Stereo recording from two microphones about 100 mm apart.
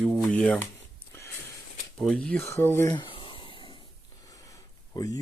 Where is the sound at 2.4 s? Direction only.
25° left (ahead or behind).